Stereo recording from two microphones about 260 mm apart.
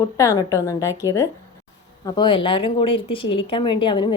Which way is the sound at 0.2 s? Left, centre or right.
Centre.